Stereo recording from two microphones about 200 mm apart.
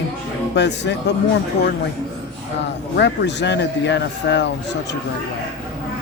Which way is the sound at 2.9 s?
60° left (ahead or behind).